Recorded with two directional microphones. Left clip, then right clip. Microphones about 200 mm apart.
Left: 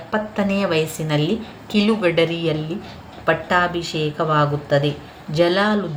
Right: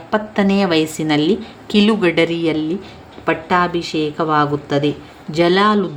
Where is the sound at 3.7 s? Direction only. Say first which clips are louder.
Right 3 dB; 45° right (ahead or behind).